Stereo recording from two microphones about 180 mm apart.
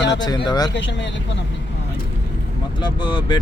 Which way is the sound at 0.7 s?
85° left.